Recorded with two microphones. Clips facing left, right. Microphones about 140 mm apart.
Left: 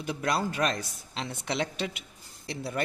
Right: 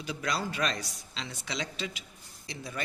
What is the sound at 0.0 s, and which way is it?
A man's voice, 55° left (ahead or behind).